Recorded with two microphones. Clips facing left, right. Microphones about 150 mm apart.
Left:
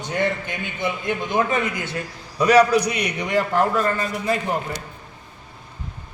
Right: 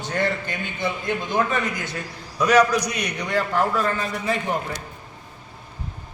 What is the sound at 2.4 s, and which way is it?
Speech, 30° left (ahead or behind).